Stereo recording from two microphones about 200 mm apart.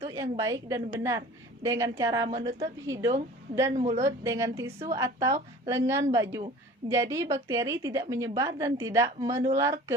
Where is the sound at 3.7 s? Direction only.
35° right (ahead or behind).